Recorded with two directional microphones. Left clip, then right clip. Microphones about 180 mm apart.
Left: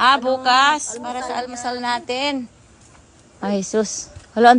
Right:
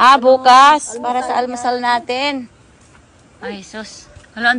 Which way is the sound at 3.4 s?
45° left (ahead or behind).